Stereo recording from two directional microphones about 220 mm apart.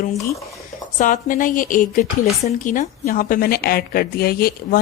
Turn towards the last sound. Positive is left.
turn(degrees=40)  # may be behind; listen again after turning